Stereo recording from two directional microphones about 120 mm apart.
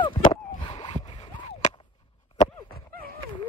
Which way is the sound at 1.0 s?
50° left (ahead or behind).